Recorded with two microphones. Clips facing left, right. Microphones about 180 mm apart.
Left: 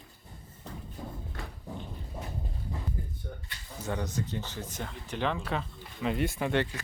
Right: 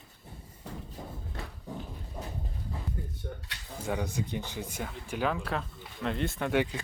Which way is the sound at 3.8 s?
10° right (ahead or behind).